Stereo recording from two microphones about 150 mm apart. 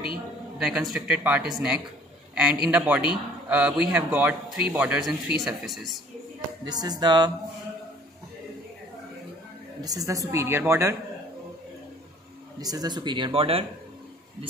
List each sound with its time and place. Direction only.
0.6 s speech: 5° right (ahead or behind)
6.6 s a woman's voice: 25° right (ahead or behind)
9.8 s a woman's voice: 25° right (ahead or behind)
12.5 s speech: 25° right (ahead or behind)